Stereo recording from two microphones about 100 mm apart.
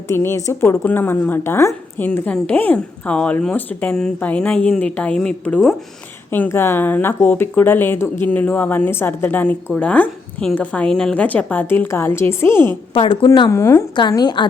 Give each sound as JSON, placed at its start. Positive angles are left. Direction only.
{"t": 0.1, "sound": "speech", "side_deg": 30}
{"t": 6.3, "sound": "speech", "side_deg": 20}
{"t": 13.1, "sound": "a woman's voice", "side_deg": 45}
{"t": 13.5, "sound": "speech", "side_deg": 30}
{"t": 14.2, "sound": "a woman's voice", "side_deg": 50}